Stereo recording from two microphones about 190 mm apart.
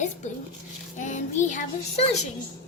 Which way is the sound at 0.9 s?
40° left (ahead or behind).